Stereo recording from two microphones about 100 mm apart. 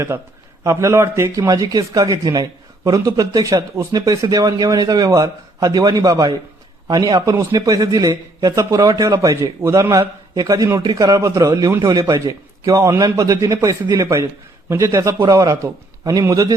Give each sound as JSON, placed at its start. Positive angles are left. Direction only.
{"t": 0.6, "sound": "a man's voice", "side_deg": -30}